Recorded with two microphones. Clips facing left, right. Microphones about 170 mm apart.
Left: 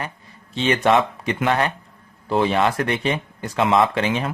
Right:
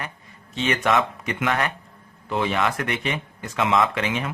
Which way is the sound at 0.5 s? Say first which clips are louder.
Left 4 dB; 30° left (ahead or behind).